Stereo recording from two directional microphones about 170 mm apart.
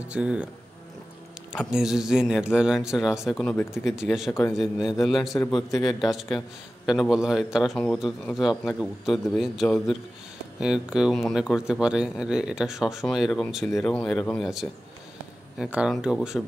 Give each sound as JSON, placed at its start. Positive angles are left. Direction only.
{"t": 0.0, "sound": "speech", "side_deg": -5}
{"t": 1.7, "sound": "speech", "side_deg": -5}
{"t": 3.7, "sound": "speech", "side_deg": -5}
{"t": 4.3, "sound": "speech", "side_deg": 15}
{"t": 4.6, "sound": "speech", "side_deg": 0}